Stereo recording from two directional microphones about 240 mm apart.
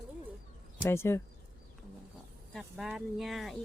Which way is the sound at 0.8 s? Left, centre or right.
Centre.